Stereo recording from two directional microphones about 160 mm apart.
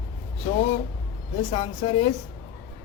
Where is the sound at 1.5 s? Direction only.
35° left (ahead or behind).